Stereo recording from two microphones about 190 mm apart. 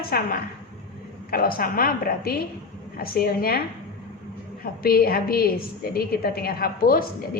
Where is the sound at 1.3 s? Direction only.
50° left (ahead or behind).